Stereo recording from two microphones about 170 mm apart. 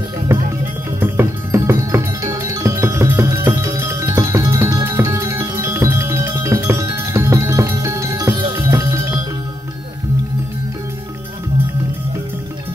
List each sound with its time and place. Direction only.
0.3 s music: 15° right (ahead or behind)